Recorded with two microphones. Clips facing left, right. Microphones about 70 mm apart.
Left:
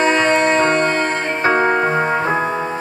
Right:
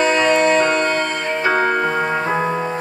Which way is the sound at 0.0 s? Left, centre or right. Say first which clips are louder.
Even; left.